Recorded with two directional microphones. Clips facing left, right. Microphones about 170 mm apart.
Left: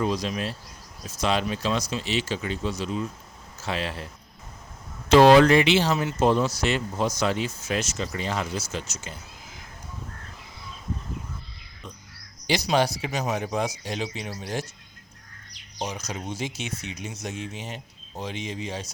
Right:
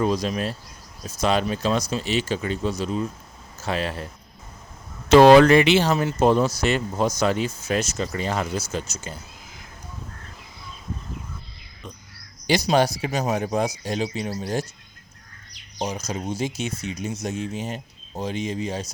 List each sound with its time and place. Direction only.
0.0 s speech: 45° right (ahead or behind)
5.0 s speech: 55° right (ahead or behind)
12.5 s speech: 45° right (ahead or behind)
15.8 s speech: 35° right (ahead or behind)